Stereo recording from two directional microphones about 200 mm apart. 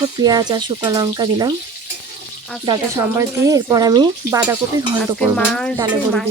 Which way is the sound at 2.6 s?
15° right (ahead or behind).